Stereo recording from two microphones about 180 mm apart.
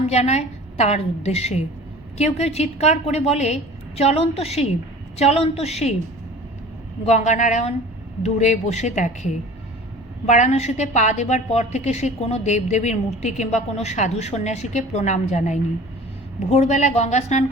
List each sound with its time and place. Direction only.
0.1 s a woman's voice: 35° left (ahead or behind)
7.0 s a woman's voice: 40° left (ahead or behind)